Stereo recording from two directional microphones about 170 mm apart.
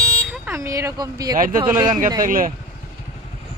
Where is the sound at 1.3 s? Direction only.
55° right (ahead or behind).